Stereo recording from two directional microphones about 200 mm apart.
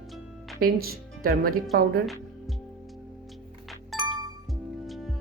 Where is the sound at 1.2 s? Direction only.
45° right (ahead or behind).